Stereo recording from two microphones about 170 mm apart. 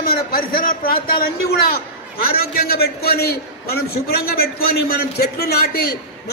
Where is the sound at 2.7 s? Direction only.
65° left (ahead or behind).